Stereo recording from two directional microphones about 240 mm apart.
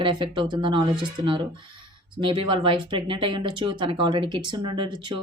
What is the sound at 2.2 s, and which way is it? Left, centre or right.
A woman's voice, right.